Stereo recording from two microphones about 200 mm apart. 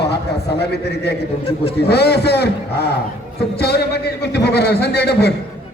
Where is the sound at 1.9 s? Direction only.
55° left (ahead or behind).